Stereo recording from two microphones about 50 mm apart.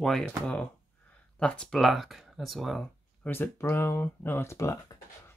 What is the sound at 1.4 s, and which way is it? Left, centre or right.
Speech, centre.